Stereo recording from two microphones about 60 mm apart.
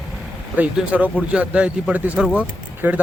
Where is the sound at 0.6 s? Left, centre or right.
Right.